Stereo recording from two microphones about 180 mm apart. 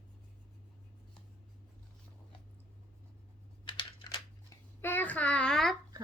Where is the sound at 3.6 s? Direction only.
25° left (ahead or behind).